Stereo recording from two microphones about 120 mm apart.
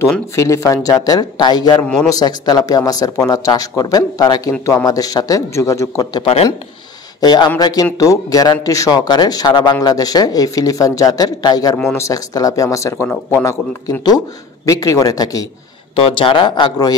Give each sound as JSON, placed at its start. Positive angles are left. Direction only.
{"t": 0.4, "sound": "speech", "side_deg": 25}
{"t": 6.2, "sound": "speech", "side_deg": 50}
{"t": 7.2, "sound": "speech", "side_deg": 35}
{"t": 16.0, "sound": "speech", "side_deg": 50}